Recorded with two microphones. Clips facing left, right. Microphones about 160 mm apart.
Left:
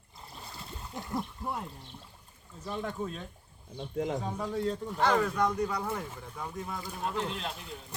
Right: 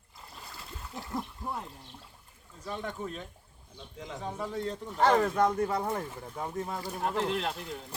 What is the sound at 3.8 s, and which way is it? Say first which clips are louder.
Speech: left 10 dB; 55° left (ahead or behind).